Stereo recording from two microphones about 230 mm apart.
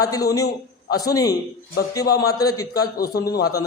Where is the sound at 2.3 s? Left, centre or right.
Centre.